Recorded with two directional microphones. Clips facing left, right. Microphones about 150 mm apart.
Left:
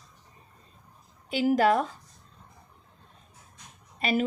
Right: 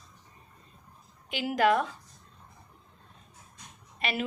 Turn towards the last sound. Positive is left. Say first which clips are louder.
# left 6 dB
turn(degrees=40)  # may be behind; listen again after turning